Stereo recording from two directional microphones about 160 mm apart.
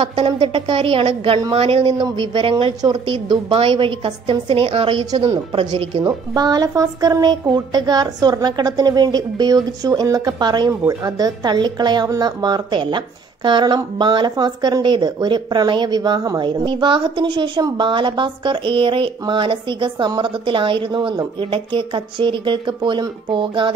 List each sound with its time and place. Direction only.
0.0 s a woman's voice: 35° right (ahead or behind)
6.0 s a woman's voice: 25° right (ahead or behind)